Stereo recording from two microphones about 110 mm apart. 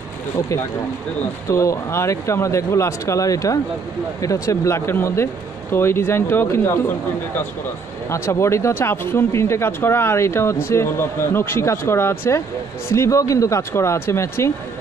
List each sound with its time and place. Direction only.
1.5 s speech: 30° left (ahead or behind)
8.1 s speech: 25° left (ahead or behind)